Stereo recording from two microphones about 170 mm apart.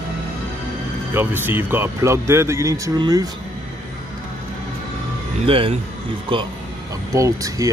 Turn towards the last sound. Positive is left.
turn(degrees=-20)  # may be behind; listen again after turning